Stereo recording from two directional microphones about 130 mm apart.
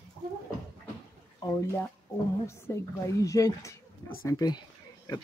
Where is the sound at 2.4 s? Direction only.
20° left (ahead or behind).